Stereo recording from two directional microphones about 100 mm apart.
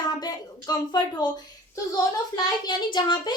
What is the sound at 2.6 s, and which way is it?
Speech, 50° left (ahead or behind).